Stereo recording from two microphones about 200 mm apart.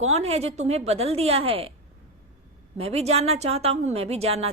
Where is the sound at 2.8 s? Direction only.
30° right (ahead or behind).